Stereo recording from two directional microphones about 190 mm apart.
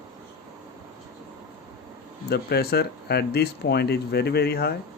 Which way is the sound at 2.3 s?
55° left (ahead or behind).